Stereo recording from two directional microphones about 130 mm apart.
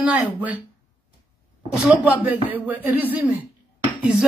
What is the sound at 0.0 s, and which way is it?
Speech, 10° right (ahead or behind).